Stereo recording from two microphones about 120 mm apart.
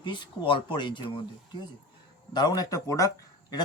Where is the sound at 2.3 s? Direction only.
35° left (ahead or behind).